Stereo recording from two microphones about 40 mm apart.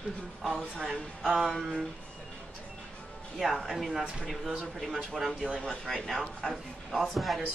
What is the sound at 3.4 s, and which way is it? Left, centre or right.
Speech, centre.